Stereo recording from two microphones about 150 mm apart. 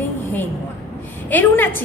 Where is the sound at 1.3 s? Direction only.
15° left (ahead or behind).